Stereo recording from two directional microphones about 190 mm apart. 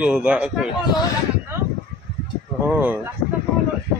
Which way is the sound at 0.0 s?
5° right (ahead or behind).